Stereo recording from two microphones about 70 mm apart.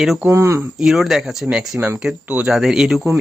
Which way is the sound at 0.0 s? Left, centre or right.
Centre.